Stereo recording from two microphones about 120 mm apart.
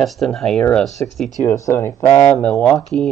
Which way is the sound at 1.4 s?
25° left (ahead or behind).